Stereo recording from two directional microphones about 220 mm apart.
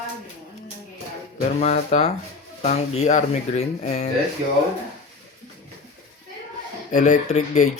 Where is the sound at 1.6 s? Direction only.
30° left (ahead or behind).